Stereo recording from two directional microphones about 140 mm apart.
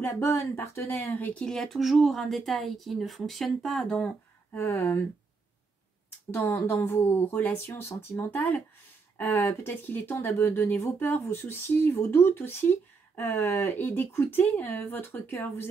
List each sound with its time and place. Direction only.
0.0 s speech: 15° left (ahead or behind)
4.5 s speech: 20° left (ahead or behind)
6.3 s speech: 20° left (ahead or behind)